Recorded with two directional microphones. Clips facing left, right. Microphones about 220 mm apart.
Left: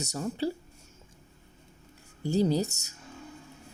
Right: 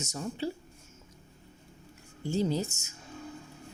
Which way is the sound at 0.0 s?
40° left (ahead or behind).